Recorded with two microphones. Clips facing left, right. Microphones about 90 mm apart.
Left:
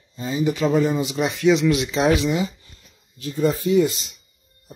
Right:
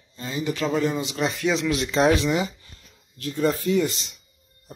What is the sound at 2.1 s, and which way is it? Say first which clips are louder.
Speech: left 1 dB; 15° left (ahead or behind).